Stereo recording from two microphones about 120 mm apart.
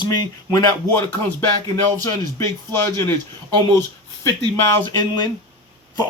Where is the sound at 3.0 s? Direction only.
20° left (ahead or behind).